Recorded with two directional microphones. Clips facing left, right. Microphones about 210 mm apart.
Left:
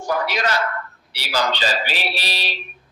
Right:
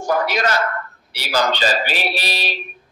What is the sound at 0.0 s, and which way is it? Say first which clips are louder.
A man's voice: right 3 dB; 45° right (ahead or behind).